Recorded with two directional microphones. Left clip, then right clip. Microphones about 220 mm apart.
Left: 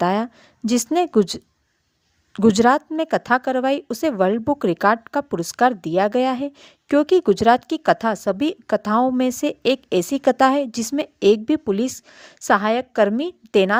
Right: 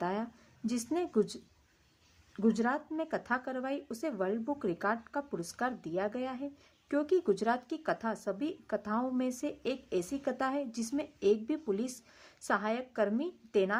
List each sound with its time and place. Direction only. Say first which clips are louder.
0.0 s speech: left 15 dB; 45° left (ahead or behind)